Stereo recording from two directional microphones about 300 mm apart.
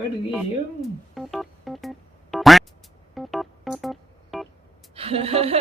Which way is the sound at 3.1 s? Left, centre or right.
Centre.